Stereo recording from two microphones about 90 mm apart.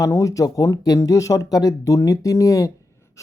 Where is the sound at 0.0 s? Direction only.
40° left (ahead or behind).